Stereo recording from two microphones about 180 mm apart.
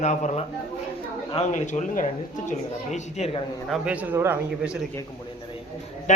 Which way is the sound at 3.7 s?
5° right (ahead or behind).